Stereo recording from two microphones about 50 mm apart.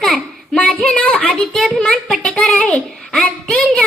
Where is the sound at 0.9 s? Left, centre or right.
Centre.